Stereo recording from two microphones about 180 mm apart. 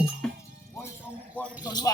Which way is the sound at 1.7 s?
20° left (ahead or behind).